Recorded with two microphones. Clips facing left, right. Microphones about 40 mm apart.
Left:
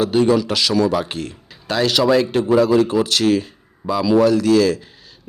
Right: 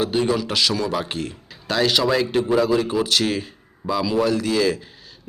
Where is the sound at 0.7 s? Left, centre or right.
Centre.